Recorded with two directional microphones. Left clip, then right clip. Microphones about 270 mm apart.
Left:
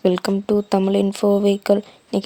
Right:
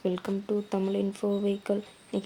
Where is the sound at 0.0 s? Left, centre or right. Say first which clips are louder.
Left 12 dB; left.